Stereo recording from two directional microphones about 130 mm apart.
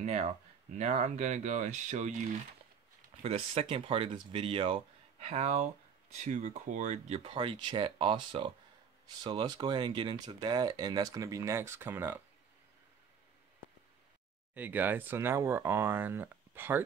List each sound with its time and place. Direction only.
0.0 s speech: 60° right (ahead or behind)
3.2 s speech: 50° right (ahead or behind)
7.2 s speech: 45° right (ahead or behind); by 12.2 s 20° right (ahead or behind)
14.5 s speech: 15° right (ahead or behind)